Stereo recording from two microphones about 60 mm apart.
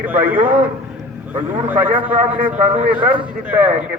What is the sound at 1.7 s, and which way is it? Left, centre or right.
A man's voice, right.